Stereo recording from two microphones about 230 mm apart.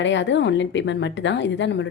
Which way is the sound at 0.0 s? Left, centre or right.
Left.